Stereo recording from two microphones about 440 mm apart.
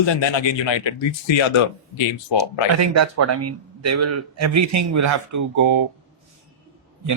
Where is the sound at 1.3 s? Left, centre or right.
Left.